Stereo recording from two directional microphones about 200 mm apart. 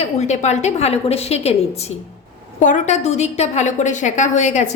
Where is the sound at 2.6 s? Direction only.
35° left (ahead or behind).